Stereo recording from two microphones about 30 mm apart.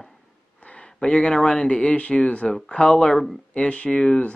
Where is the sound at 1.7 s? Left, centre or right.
Left.